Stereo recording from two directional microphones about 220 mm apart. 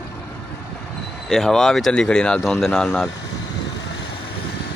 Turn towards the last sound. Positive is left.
turn(degrees=5)  # may be behind; listen again after turning